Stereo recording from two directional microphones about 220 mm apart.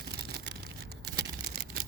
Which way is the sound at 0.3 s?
50° right (ahead or behind).